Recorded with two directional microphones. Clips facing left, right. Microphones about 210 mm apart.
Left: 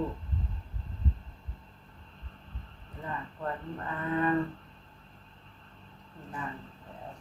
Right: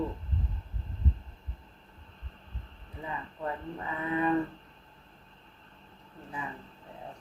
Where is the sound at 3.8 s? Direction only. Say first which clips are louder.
Even; 10° right (ahead or behind).